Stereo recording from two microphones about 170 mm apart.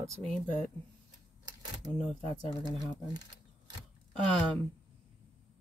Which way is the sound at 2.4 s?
Centre (ahead or behind).